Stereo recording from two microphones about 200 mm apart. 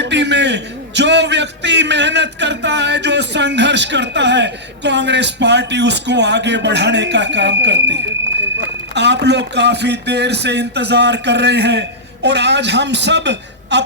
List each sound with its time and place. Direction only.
0.0 s a man's voice: 60° right (ahead or behind)